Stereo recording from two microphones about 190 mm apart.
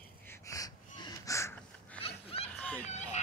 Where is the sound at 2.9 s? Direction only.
35° left (ahead or behind).